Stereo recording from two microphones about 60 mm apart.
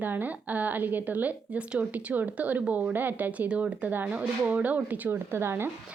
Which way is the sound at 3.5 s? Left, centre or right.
Right.